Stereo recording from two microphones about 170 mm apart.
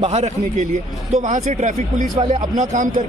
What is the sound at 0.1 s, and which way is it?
A man's voice, 40° right (ahead or behind).